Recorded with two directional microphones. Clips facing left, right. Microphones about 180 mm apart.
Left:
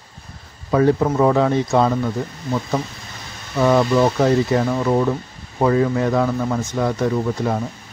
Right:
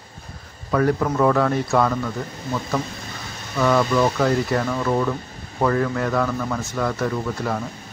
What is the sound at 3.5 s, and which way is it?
Speech, 20° left (ahead or behind).